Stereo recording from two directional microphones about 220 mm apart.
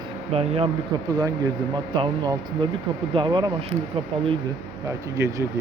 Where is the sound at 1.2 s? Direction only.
15° right (ahead or behind).